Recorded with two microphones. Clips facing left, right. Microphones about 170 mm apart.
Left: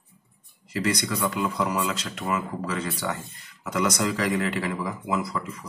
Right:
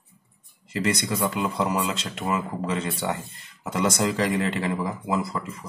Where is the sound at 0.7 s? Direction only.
25° right (ahead or behind).